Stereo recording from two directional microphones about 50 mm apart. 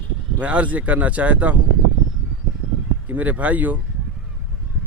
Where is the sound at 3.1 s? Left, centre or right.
Right.